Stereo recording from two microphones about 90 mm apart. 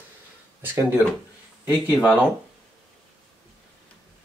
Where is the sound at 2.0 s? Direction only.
15° right (ahead or behind).